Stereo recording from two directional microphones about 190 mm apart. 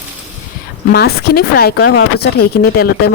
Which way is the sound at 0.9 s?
55° left (ahead or behind).